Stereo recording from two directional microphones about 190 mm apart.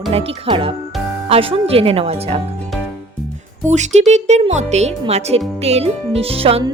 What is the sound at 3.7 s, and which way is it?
Speech, 35° right (ahead or behind).